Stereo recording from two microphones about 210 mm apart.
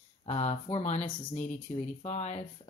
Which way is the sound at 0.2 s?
30° left (ahead or behind).